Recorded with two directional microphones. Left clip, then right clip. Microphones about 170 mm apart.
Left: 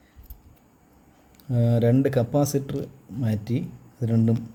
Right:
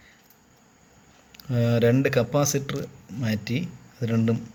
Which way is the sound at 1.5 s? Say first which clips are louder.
Right 1 dB; 15° left (ahead or behind).